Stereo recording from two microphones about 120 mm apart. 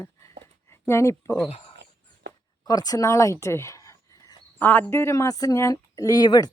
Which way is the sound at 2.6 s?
30° left (ahead or behind).